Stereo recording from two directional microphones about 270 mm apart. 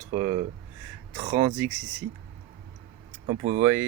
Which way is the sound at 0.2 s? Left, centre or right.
Centre.